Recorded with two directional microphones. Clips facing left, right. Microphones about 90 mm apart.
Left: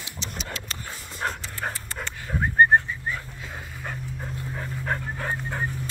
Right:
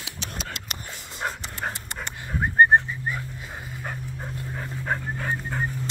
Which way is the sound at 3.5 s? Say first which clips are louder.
Even; 10° right (ahead or behind).